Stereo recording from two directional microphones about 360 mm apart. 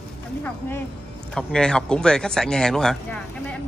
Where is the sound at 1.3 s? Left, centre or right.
Centre.